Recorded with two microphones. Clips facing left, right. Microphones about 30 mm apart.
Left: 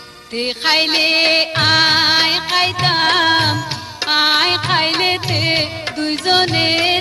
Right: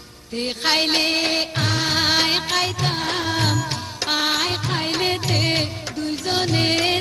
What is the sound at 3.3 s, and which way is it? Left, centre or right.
Music, left.